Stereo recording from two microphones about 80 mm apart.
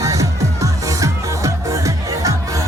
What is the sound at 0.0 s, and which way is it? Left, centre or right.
Music, right.